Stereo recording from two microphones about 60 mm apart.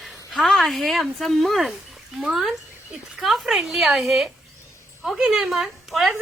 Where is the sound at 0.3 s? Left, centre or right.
Centre.